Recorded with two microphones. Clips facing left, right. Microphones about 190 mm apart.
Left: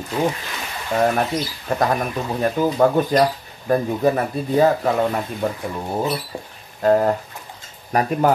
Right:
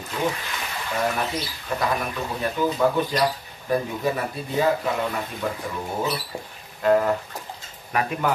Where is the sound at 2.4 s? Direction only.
45° left (ahead or behind).